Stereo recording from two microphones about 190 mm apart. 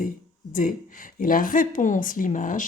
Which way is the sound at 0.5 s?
45° left (ahead or behind).